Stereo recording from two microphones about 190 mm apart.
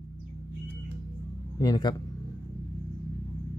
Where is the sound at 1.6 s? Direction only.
20° left (ahead or behind).